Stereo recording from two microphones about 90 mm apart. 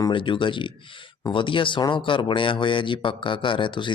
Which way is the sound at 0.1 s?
70° left (ahead or behind).